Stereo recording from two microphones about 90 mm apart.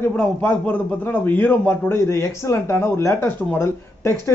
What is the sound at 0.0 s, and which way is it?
A man's voice, 15° left (ahead or behind).